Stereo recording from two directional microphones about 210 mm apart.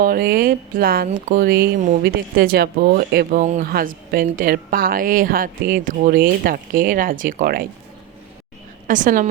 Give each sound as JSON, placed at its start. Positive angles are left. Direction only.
{"t": 0.0, "sound": "speech", "side_deg": -45}
{"t": 8.9, "sound": "a woman's voice", "side_deg": -40}